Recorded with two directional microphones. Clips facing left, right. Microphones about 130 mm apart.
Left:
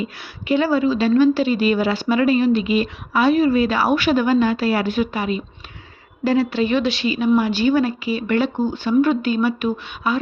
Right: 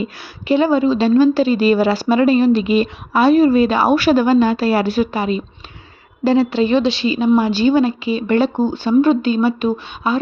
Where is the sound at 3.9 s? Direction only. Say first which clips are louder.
Right 4 dB; 35° right (ahead or behind).